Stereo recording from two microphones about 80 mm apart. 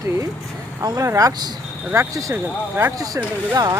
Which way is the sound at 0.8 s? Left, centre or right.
Right.